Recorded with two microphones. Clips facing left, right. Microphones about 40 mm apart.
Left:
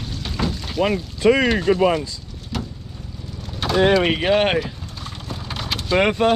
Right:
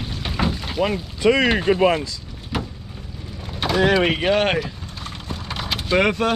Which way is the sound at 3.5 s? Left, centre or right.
Centre.